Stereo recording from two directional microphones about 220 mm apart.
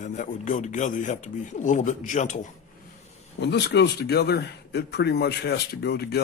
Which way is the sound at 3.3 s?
50° left (ahead or behind).